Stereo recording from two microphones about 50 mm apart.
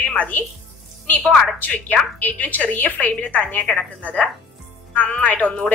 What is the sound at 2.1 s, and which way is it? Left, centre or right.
A woman's voice, left.